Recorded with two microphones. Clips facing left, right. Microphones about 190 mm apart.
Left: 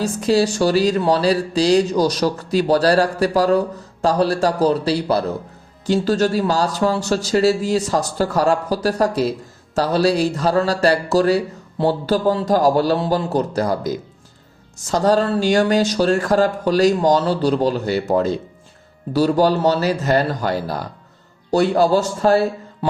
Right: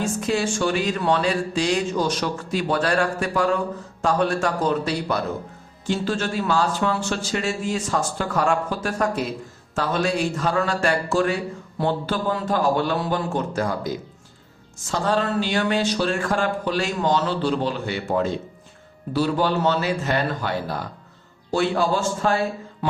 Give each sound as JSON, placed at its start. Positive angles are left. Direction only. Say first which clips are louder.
{"t": 0.0, "sound": "speech", "louder": "left 6 dB", "side_deg": 35}